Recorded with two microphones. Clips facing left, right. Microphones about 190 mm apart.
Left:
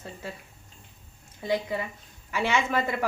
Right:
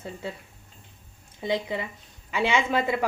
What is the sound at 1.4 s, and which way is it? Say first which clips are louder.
Speech: even; 20° right (ahead or behind).